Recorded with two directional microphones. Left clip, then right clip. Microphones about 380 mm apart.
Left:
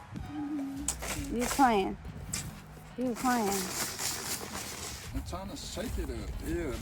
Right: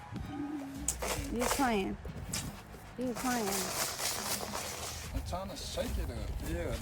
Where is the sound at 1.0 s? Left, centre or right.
Centre.